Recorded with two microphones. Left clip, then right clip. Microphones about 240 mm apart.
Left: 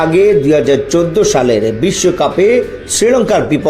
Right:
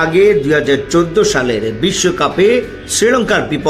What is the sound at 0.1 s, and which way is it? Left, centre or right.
A man's voice, centre.